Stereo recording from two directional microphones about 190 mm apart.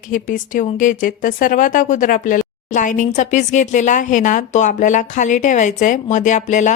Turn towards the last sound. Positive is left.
turn(degrees=40)  # may be behind; listen again after turning